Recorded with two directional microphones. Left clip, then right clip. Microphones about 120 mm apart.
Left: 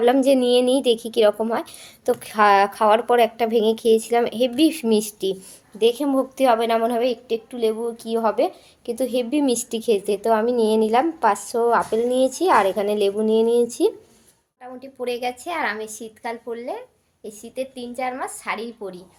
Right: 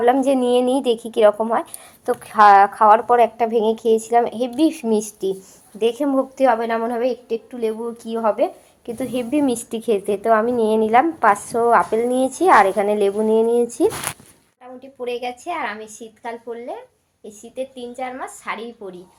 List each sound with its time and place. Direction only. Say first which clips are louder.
0.0 s a woman's voice: right 1 dB; 40° left (ahead or behind)
0.3 s a woman's voice: even; 25° left (ahead or behind); by 5.4 s 45° left (ahead or behind)
5.8 s a woman's voice: even; 20° left (ahead or behind); by 8.0 s centre (ahead or behind)
8.1 s a woman's voice: right 1 dB; 15° left (ahead or behind); by 13.9 s 5° right (ahead or behind)
14.8 s a woman's voice: even; 25° left (ahead or behind)